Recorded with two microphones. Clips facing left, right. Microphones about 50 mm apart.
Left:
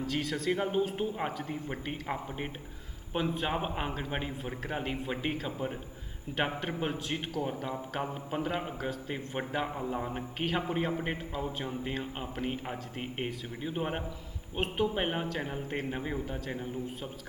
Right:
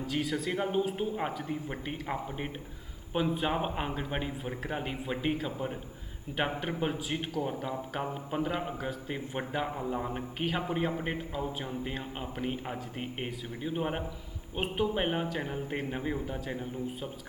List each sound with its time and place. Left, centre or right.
0.0 s a man's voice: centre